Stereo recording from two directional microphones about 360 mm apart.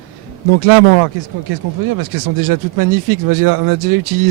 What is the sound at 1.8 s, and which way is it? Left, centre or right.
Speech, right.